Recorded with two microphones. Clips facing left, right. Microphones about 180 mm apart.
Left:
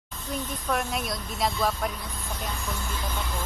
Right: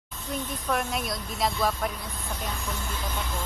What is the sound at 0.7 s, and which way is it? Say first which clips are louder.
A woman's voice: even; centre (ahead or behind).